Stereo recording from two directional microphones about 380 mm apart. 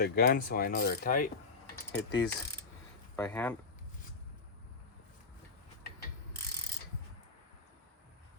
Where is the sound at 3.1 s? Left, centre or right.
Centre.